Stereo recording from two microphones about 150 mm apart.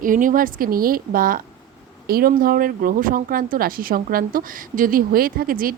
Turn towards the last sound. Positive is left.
turn(degrees=-75)  # may be behind; listen again after turning